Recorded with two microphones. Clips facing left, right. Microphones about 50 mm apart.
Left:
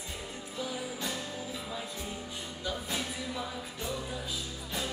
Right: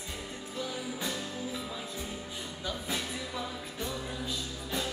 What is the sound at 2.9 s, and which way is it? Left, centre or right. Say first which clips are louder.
Music: even; centre.